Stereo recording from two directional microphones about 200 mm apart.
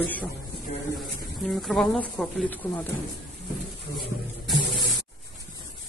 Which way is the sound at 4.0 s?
Centre (ahead or behind).